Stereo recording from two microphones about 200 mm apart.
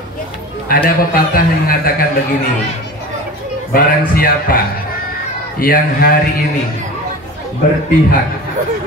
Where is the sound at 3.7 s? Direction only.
45° left (ahead or behind).